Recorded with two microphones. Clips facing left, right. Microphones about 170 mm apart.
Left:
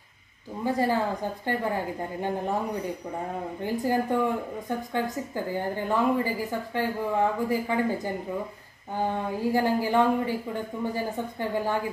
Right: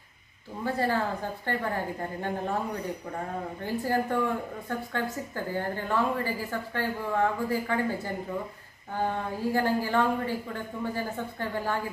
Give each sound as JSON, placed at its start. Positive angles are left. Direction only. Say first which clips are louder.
{"t": 0.7, "sound": "a woman's voice", "louder": "left 3 dB", "side_deg": 15}
{"t": 3.6, "sound": "a woman's voice", "louder": "left 2 dB", "side_deg": 15}